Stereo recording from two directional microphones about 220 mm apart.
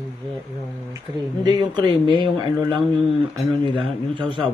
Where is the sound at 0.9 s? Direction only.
15° right (ahead or behind).